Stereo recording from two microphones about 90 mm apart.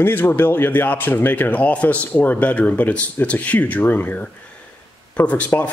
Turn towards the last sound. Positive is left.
turn(degrees=15)  # may be behind; listen again after turning